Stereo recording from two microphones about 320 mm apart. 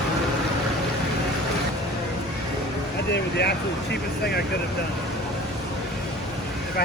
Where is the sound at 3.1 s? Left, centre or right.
Left.